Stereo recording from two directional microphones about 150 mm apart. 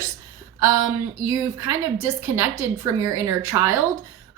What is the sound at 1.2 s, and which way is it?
Speech, 25° right (ahead or behind).